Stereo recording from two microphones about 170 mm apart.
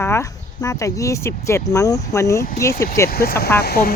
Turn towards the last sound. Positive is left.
turn(degrees=65)  # may be behind; listen again after turning